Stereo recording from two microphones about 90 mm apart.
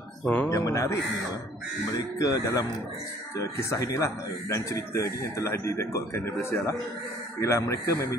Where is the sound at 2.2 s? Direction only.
40° left (ahead or behind).